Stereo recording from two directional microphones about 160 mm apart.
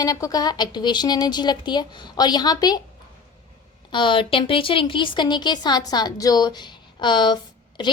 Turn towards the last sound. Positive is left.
turn(degrees=30)  # may be behind; listen again after turning